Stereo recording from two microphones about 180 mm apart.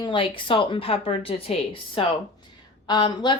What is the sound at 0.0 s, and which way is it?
Speech, 25° left (ahead or behind).